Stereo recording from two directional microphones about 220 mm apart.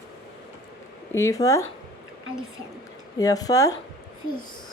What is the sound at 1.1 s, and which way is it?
Speech, 15° left (ahead or behind).